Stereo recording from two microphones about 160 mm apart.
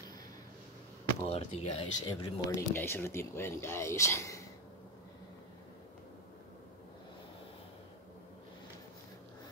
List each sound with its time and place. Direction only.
1.2 s speech: 40° left (ahead or behind)
2.5 s speech: 15° left (ahead or behind)